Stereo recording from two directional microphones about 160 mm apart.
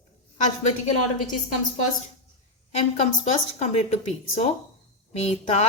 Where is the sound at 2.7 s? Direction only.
45° left (ahead or behind).